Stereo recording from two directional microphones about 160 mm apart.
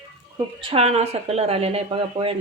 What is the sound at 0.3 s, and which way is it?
Speech, 35° right (ahead or behind).